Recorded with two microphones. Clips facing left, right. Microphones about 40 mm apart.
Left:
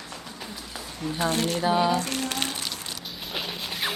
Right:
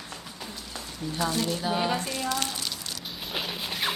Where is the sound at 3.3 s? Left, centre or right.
Centre.